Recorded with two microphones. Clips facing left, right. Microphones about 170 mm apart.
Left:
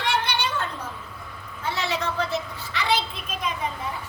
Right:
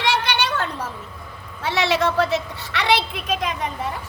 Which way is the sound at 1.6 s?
75° right (ahead or behind).